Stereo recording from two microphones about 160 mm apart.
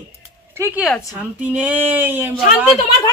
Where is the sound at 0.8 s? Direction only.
Centre (ahead or behind).